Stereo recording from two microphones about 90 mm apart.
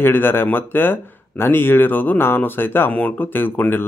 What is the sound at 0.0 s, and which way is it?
Speech, 25° left (ahead or behind).